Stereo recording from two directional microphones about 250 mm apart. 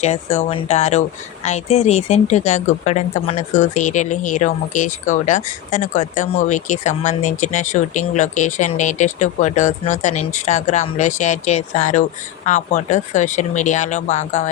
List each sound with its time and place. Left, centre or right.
0.0 s speech: left